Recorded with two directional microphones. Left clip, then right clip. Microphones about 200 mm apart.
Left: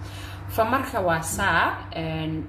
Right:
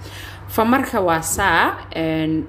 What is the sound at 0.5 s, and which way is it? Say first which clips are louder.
A woman's voice: right 5 dB; 45° right (ahead or behind).